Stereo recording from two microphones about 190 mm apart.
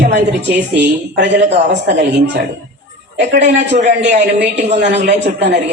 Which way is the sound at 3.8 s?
40° right (ahead or behind).